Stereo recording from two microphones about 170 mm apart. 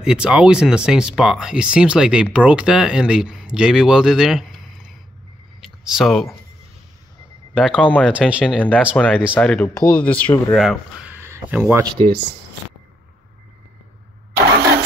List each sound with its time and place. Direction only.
0.0 s speech: 5° right (ahead or behind)
5.6 s a sound: centre (ahead or behind)
7.5 s speech: 5° left (ahead or behind)
8.0 s speech: 5° right (ahead or behind)
8.9 s speech: 5° left (ahead or behind); by 11.8 s 10° right (ahead or behind)